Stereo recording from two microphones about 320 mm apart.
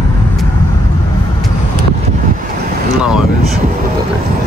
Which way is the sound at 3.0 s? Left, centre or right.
Centre.